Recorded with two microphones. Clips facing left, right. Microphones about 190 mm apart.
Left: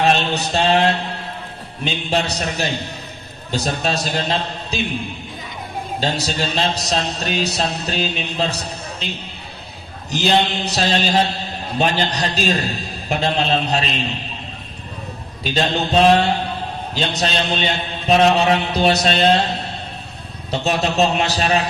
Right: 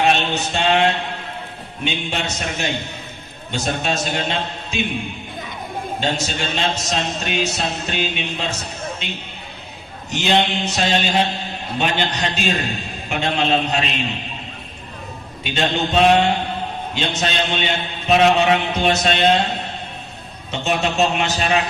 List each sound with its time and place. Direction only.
0.2 s a man's voice: 35° left (ahead or behind)
6.0 s a man's voice: 35° left (ahead or behind)
15.4 s a man's voice: 35° left (ahead or behind)